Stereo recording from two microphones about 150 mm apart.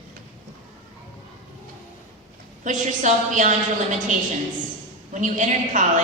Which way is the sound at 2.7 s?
55° right (ahead or behind).